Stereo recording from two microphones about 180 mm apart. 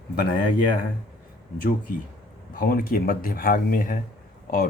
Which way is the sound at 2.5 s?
55° left (ahead or behind).